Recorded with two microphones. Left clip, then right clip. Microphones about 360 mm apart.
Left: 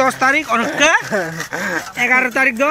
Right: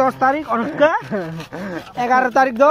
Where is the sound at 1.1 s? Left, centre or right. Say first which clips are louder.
Left 6 dB; left.